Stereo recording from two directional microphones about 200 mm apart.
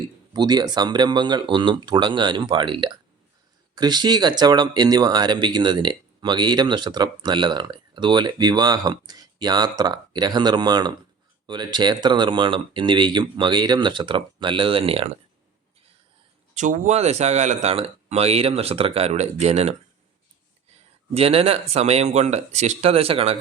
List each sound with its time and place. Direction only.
0.3 s speech: 20° right (ahead or behind)
16.6 s speech: 40° right (ahead or behind)
21.1 s speech: 30° right (ahead or behind)